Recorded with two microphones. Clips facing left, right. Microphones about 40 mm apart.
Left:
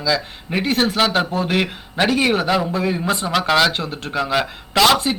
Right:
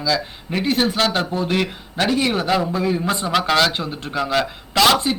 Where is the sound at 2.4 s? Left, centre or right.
Centre.